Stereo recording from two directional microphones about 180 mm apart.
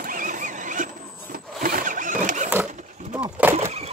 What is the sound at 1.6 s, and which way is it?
Zipper, 50° right (ahead or behind).